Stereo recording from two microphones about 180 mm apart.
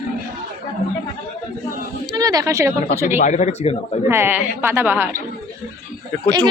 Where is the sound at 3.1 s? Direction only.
40° left (ahead or behind).